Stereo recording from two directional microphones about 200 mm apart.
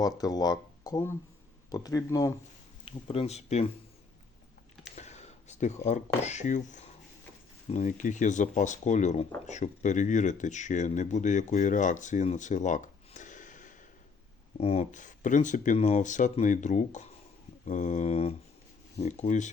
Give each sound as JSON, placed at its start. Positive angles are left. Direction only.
{"t": 0.0, "sound": "speech", "side_deg": 20}
{"t": 2.8, "sound": "speech", "side_deg": 30}
{"t": 4.9, "sound": "speech", "side_deg": 35}